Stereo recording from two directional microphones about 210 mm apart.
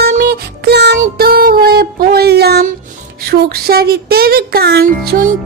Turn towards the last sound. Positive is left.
turn(degrees=-45)  # may be behind; listen again after turning